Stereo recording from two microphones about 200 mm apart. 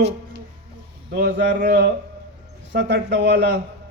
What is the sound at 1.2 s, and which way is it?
A man's voice, 60° right (ahead or behind).